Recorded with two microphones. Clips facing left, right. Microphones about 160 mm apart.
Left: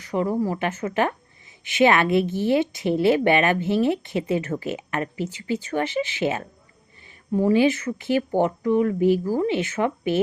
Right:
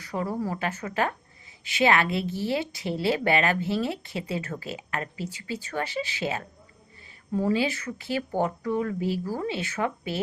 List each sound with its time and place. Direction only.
0.0 s a woman's voice: 20° left (ahead or behind)
7.4 s a woman's voice: 20° left (ahead or behind)